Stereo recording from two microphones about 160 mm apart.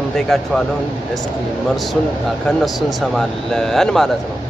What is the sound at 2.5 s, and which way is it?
Speech, centre (ahead or behind).